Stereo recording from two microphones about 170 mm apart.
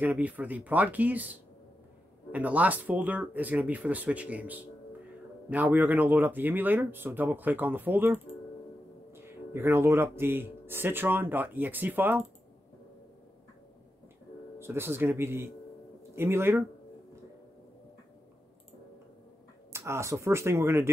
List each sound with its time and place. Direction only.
0.0 s speech: 10° right (ahead or behind)
14.6 s speech: 15° right (ahead or behind)
19.7 s speech: 15° right (ahead or behind)